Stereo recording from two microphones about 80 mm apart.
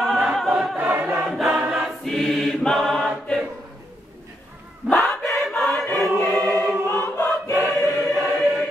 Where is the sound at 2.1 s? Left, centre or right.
Centre.